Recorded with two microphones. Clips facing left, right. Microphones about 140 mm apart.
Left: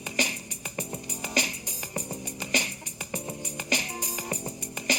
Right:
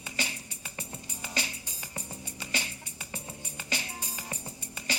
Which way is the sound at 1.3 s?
15° left (ahead or behind).